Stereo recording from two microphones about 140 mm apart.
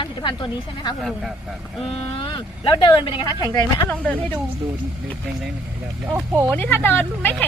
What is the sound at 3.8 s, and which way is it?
Speech, 10° left (ahead or behind).